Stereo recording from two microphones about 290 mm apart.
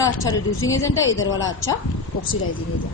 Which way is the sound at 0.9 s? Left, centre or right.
Left.